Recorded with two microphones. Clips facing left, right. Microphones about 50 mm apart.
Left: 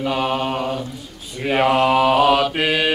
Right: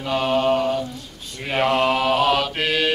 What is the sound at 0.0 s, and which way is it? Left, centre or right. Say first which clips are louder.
Mantra: right 1 dB; centre.